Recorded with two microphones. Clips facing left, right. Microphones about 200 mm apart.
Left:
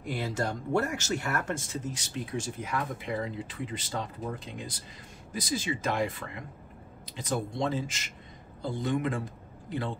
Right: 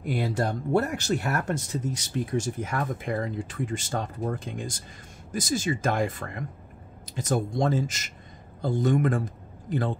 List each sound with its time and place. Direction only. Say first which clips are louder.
0.3 s speech: right 4 dB; 35° right (ahead or behind)